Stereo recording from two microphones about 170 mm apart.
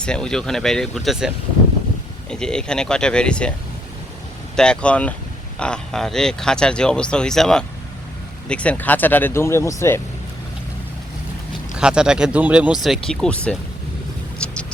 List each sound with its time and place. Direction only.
0.0 s speech: 5° left (ahead or behind)
2.3 s speech: 5° left (ahead or behind)
4.5 s speech: 5° left (ahead or behind)
11.8 s speech: 5° right (ahead or behind)
14.4 s a sound: 5° left (ahead or behind)